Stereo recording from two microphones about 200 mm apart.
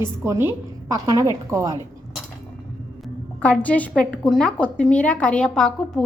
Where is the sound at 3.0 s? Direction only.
5° left (ahead or behind).